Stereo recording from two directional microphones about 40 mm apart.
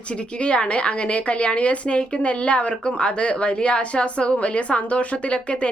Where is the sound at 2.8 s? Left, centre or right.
Left.